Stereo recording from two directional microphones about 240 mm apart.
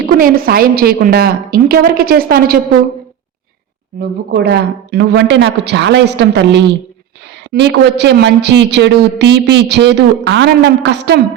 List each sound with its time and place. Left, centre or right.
0.0 s a woman's voice: right
4.3 s a woman's voice: right